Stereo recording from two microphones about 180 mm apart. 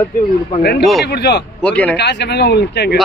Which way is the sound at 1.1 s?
65° left (ahead or behind).